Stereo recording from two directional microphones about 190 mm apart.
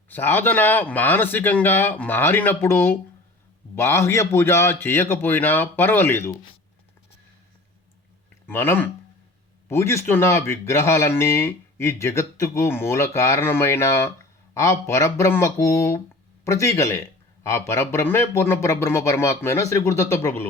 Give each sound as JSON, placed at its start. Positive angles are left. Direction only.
{"t": 0.1, "sound": "speech", "side_deg": 10}
{"t": 8.4, "sound": "speech", "side_deg": 10}